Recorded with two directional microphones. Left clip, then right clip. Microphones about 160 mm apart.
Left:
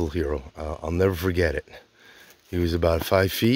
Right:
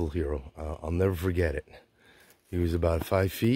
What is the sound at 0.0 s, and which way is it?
Speech, 15° left (ahead or behind).